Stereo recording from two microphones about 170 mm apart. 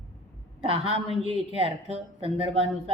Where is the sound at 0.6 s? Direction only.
35° right (ahead or behind).